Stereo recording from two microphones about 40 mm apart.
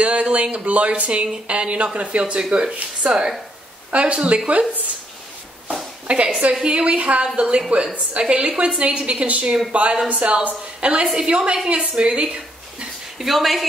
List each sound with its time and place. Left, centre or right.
0.0 s a woman's voice: right
6.0 s a woman's voice: right
13.2 s speech: centre